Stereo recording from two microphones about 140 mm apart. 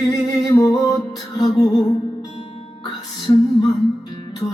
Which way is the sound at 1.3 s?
30° left (ahead or behind).